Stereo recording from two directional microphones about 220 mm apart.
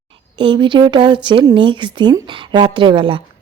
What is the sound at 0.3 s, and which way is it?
Speech, 20° right (ahead or behind).